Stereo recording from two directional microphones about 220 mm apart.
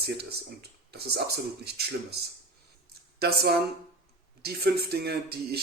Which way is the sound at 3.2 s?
45° right (ahead or behind).